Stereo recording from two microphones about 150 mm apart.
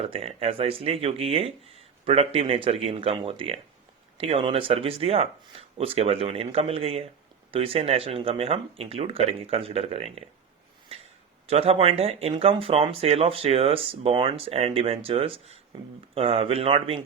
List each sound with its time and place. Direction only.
0.0 s speech: 40° right (ahead or behind)
11.4 s speech: 40° right (ahead or behind)